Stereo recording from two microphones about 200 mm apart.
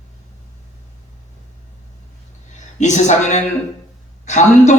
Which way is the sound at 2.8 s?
35° left (ahead or behind).